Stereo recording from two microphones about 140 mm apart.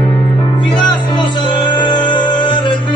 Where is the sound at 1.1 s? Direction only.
30° left (ahead or behind).